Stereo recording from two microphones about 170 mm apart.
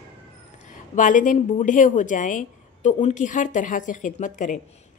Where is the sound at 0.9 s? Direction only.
50° left (ahead or behind).